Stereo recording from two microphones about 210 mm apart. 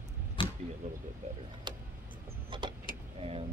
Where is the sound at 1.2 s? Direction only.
30° right (ahead or behind).